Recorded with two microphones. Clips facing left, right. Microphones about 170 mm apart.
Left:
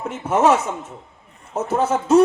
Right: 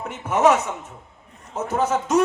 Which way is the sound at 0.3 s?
30° left (ahead or behind).